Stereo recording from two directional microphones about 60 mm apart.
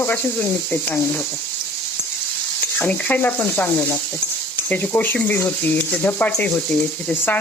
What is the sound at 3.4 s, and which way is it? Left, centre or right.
Sizzle, left.